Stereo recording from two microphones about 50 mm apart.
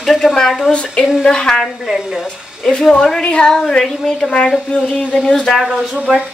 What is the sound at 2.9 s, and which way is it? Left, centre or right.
A woman's voice, centre.